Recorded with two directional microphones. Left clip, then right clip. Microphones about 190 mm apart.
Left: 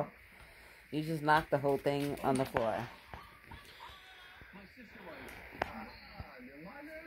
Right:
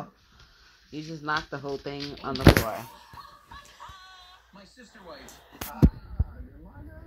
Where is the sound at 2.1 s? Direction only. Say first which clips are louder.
Right 11 dB; 35° left (ahead or behind).